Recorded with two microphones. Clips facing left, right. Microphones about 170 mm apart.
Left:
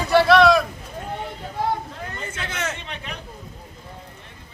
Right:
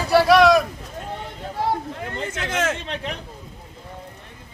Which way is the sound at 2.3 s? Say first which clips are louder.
Right 6 dB; 90° right.